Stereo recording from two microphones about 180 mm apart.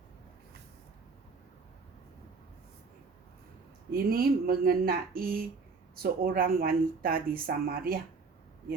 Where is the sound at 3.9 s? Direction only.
55° right (ahead or behind).